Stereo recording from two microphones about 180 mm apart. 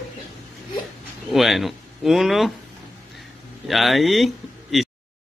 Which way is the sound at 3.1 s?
Centre (ahead or behind).